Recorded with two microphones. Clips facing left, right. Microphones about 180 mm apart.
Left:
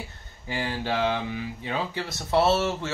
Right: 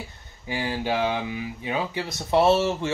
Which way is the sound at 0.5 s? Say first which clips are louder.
Right 2 dB; 15° right (ahead or behind).